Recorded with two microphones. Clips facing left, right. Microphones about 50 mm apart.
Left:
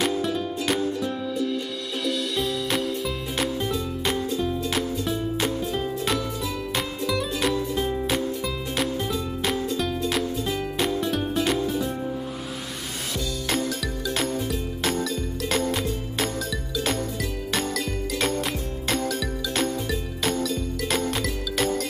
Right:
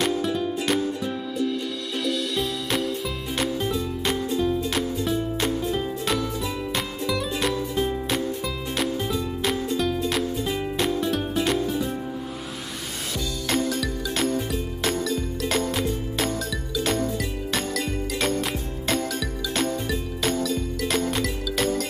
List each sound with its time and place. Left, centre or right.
0.0 s music: centre
13.5 s music: centre